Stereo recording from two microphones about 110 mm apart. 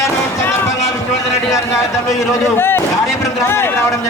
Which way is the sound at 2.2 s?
20° left (ahead or behind).